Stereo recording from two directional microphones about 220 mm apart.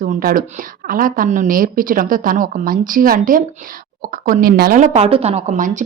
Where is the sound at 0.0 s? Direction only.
40° right (ahead or behind).